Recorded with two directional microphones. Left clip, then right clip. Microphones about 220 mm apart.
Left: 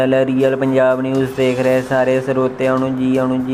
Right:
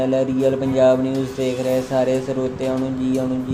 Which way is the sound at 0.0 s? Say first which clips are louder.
Left 4 dB; 5° left (ahead or behind).